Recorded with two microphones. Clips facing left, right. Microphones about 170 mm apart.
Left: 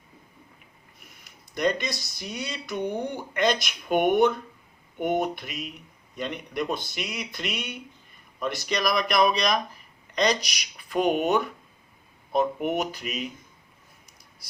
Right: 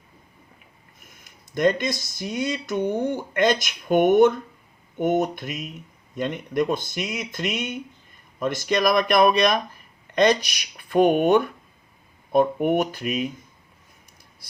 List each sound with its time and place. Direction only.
0.9 s speech: 50° right (ahead or behind)